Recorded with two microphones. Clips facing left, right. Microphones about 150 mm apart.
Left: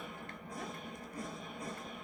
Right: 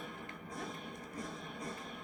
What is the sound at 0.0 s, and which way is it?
Music, 5° left (ahead or behind).